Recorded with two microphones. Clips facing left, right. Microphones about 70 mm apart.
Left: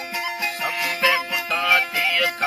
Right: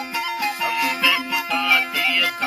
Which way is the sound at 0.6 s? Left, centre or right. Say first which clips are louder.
Even; left.